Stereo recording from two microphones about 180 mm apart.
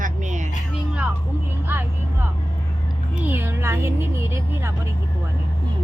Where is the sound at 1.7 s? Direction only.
10° right (ahead or behind).